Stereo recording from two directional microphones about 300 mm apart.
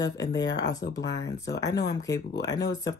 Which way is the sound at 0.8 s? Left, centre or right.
Left.